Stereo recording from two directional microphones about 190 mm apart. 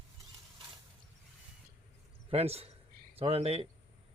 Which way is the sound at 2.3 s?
30° right (ahead or behind).